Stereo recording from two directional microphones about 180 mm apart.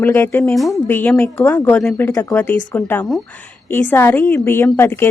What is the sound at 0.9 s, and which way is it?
Speech, 10° left (ahead or behind).